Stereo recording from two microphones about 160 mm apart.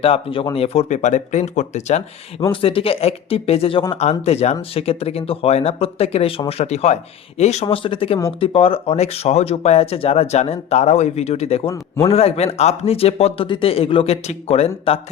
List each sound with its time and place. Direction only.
0.0 s speech: 35° left (ahead or behind)
2.4 s speech: 35° left (ahead or behind)